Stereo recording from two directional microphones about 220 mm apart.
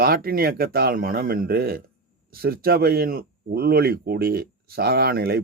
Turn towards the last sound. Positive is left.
turn(degrees=-45)  # may be behind; listen again after turning